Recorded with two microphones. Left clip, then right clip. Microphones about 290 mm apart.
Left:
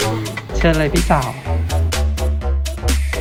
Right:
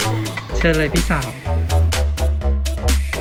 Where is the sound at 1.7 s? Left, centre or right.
Centre.